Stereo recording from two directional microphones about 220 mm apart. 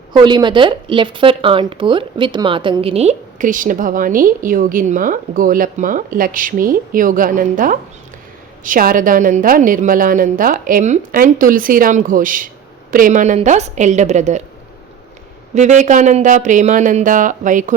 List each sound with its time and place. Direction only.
0.1 s speech: 20° right (ahead or behind)
15.5 s speech: 30° right (ahead or behind)